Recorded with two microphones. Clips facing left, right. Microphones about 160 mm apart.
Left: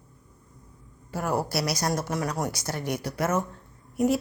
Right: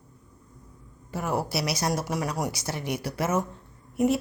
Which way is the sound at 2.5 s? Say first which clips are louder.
Even; 30° right (ahead or behind).